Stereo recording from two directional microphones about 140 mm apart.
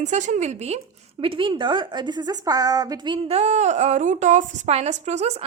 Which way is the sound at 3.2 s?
50° right (ahead or behind).